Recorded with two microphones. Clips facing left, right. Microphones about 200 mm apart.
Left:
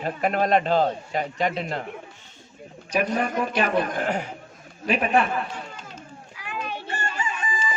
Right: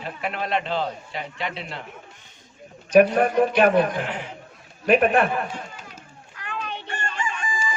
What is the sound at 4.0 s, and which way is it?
Speech, 45° left (ahead or behind).